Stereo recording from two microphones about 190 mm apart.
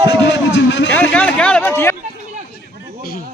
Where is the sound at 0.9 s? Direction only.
10° left (ahead or behind).